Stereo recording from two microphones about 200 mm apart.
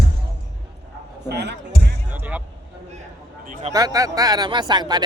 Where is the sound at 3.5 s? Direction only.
35° right (ahead or behind).